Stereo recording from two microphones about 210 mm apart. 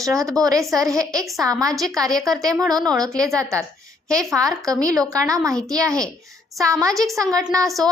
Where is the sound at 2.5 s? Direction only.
15° right (ahead or behind).